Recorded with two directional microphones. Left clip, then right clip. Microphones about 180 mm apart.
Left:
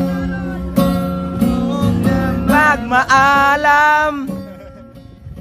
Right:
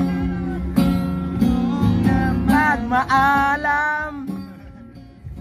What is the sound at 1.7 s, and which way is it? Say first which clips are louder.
Music: left 3 dB; 55° left (ahead or behind).